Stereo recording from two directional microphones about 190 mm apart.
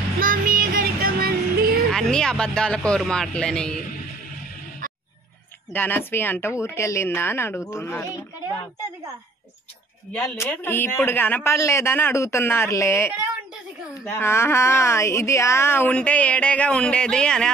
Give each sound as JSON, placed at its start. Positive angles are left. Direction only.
{"t": 0.2, "sound": "music", "side_deg": -45}
{"t": 1.9, "sound": "speech", "side_deg": 5}
{"t": 5.7, "sound": "speech", "side_deg": 10}
{"t": 10.1, "sound": "speech", "side_deg": 10}
{"t": 14.1, "sound": "speech", "side_deg": 15}